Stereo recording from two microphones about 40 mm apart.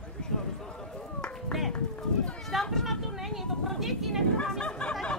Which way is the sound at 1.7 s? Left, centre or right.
Left.